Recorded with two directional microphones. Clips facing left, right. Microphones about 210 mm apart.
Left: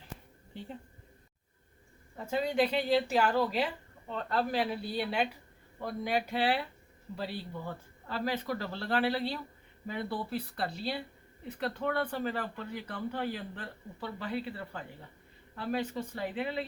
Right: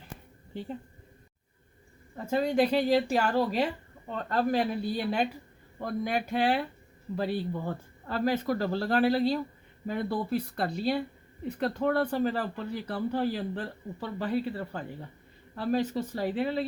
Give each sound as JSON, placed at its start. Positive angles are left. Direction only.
{"t": 2.1, "sound": "speech", "side_deg": -45}